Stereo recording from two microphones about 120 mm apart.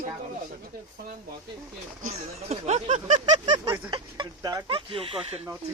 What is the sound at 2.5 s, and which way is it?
Speech, 70° right (ahead or behind).